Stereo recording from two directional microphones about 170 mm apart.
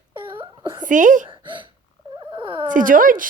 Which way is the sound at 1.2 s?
30° right (ahead or behind).